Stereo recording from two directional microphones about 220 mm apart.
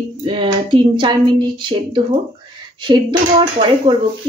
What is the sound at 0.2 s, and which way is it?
Speech, 20° right (ahead or behind).